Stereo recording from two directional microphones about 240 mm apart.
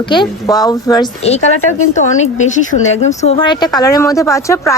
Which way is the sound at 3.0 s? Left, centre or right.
Left.